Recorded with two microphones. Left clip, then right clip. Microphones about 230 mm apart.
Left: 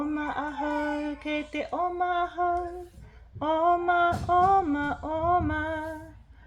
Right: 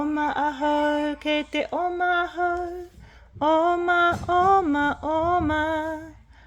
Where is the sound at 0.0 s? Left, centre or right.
Right.